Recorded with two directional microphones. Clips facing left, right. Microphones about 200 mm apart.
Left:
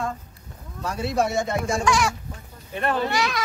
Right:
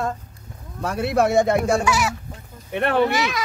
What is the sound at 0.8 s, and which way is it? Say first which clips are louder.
Speech: right 4 dB; 60° right (ahead or behind).